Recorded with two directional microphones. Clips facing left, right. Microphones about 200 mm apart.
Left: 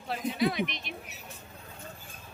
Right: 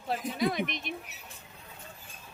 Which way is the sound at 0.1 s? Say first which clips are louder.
Left 1 dB; 45° right (ahead or behind).